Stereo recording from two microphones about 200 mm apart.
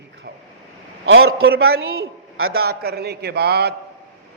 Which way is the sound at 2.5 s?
50° right (ahead or behind).